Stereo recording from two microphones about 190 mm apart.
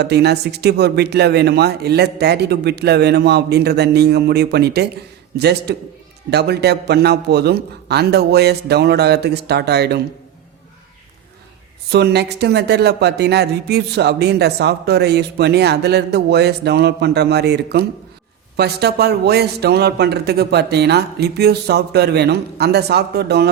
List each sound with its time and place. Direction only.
0.0 s speech: 60° right (ahead or behind)
11.9 s speech: 60° right (ahead or behind)